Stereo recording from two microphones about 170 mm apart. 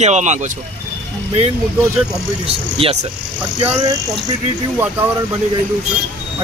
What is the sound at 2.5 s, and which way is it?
Speech, 35° right (ahead or behind).